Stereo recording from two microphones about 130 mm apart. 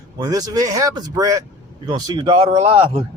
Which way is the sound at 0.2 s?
30° right (ahead or behind).